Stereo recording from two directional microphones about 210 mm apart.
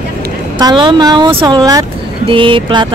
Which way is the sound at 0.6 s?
20° right (ahead or behind).